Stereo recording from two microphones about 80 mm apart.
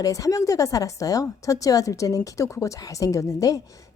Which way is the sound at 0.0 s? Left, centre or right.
Left.